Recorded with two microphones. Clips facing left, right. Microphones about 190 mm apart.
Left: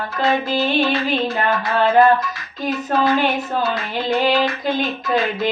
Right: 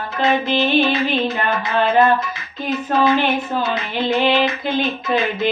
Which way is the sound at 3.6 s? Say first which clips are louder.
Right 1 dB; 20° right (ahead or behind).